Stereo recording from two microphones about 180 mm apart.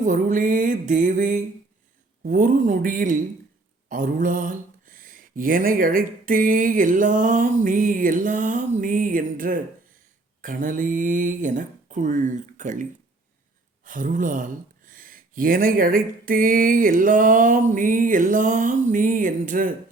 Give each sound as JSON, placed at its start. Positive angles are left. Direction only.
{"t": 0.0, "sound": "speech", "side_deg": -45}